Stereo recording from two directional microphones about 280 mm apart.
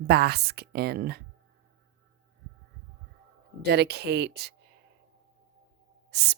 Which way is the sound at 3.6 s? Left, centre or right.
Right.